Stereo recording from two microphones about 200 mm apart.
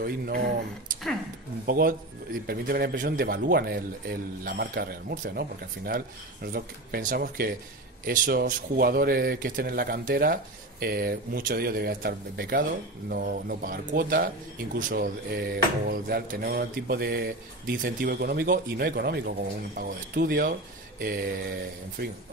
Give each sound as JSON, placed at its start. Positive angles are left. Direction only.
{"t": 0.0, "sound": "a man's voice", "side_deg": -50}
{"t": 22.0, "sound": "a man's voice", "side_deg": -50}